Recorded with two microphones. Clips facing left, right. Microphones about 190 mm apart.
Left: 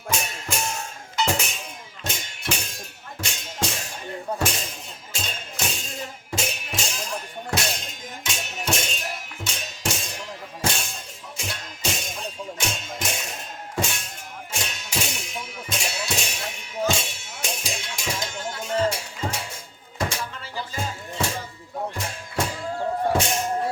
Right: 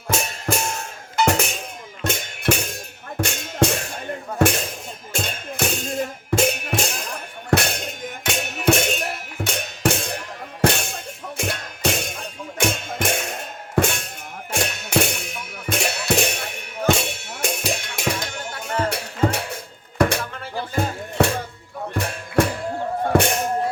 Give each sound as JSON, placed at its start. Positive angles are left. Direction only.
{"t": 1.1, "sound": "music", "side_deg": -60}